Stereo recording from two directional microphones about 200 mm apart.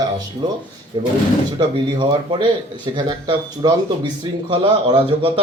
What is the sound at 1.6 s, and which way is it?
Speech, 25° right (ahead or behind).